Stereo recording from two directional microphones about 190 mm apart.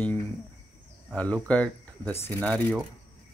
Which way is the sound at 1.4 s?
5° left (ahead or behind).